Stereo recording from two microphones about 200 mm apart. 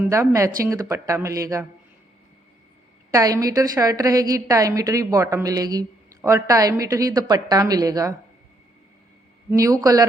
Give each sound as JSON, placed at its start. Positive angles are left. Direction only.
{"t": 0.0, "sound": "a woman's voice", "side_deg": -15}
{"t": 3.1, "sound": "a woman's voice", "side_deg": -15}
{"t": 9.5, "sound": "a woman's voice", "side_deg": -15}